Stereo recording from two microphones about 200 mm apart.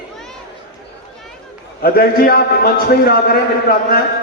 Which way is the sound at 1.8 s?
50° left (ahead or behind).